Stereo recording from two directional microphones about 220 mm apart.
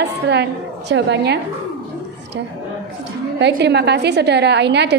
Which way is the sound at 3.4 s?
50° right (ahead or behind).